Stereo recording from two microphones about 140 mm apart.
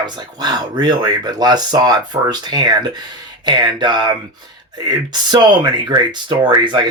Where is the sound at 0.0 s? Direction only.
30° right (ahead or behind).